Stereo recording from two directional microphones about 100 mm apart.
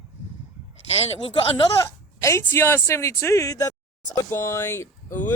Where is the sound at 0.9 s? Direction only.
85° left.